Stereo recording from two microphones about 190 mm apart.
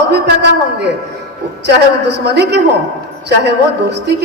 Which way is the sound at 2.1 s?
60° right (ahead or behind).